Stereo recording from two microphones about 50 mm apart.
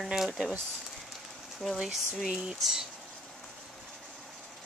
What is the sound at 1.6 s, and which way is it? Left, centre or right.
Speech, centre.